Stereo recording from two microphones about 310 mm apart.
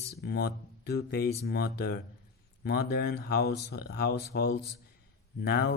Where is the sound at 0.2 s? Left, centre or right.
Left.